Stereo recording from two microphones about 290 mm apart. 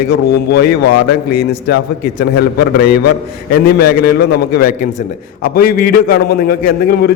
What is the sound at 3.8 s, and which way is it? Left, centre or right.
A man's voice, left.